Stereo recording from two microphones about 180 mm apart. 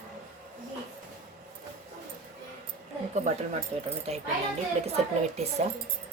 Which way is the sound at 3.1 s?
40° right (ahead or behind).